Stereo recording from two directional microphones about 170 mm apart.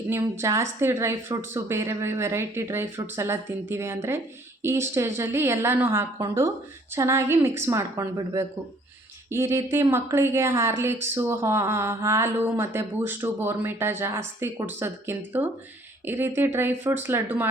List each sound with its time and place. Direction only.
0.1 s speech: 15° right (ahead or behind)